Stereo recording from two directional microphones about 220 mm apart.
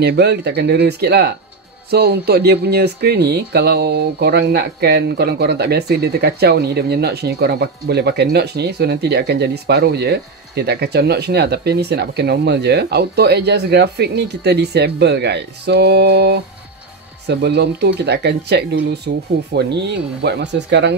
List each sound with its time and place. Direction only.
0.0 s speech: 50° right (ahead or behind)